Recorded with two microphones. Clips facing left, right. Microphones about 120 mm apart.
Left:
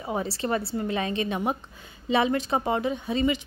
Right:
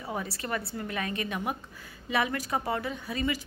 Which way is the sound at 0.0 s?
25° left (ahead or behind).